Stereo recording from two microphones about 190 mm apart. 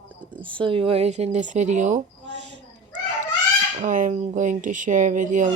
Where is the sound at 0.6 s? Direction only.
30° right (ahead or behind).